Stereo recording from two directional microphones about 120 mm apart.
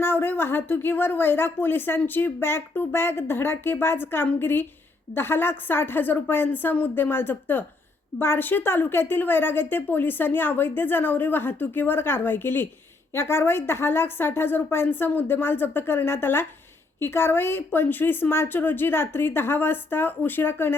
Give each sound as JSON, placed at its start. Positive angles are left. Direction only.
{"t": 0.0, "sound": "speech", "side_deg": 15}